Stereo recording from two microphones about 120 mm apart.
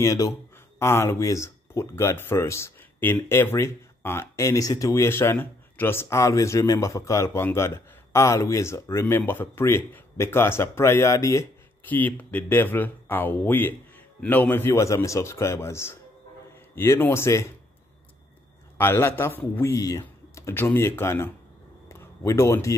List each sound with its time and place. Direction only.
0.0 s speech: 30° left (ahead or behind)
11.9 s a man's voice: 15° left (ahead or behind)
18.8 s speech: 20° left (ahead or behind)
19.7 s speech: 30° left (ahead or behind)
21.8 s a sound: 20° left (ahead or behind)